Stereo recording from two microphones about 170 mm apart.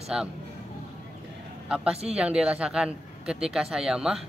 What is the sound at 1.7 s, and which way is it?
Speech, 5° right (ahead or behind).